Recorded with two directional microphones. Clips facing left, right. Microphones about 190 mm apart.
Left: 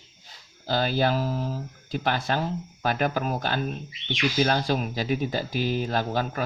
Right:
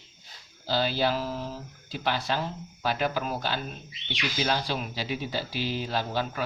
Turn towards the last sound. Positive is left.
turn(degrees=45)  # may be behind; listen again after turning